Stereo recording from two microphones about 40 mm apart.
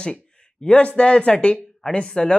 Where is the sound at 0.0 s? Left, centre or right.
Left.